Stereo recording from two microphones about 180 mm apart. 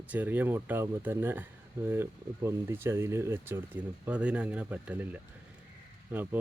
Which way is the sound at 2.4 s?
15° right (ahead or behind).